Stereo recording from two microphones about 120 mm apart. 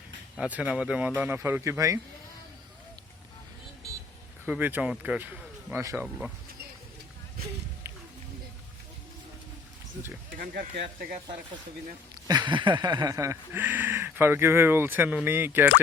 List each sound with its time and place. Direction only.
0.3 s speech: 10° right (ahead or behind)
4.4 s speech: 10° right (ahead or behind)
7.9 s wild animals: 20° right (ahead or behind)
12.3 s speech: 40° right (ahead or behind)
13.1 s speech: 25° right (ahead or behind)